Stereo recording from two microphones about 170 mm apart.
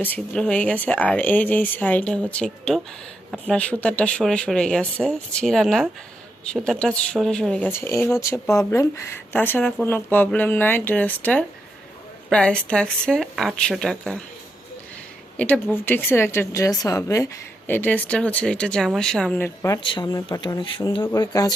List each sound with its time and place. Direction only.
0.0 s speech: 10° left (ahead or behind)
15.4 s speech: 10° left (ahead or behind)
19.5 s speech: 20° left (ahead or behind)